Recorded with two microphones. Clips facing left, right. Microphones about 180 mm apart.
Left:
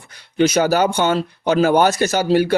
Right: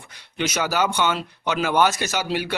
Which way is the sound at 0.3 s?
35° left (ahead or behind).